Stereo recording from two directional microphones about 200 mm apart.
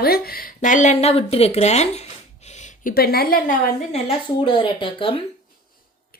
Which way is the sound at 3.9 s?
25° left (ahead or behind).